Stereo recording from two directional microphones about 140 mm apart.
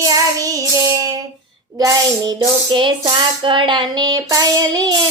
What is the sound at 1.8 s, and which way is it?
Speech, 30° right (ahead or behind).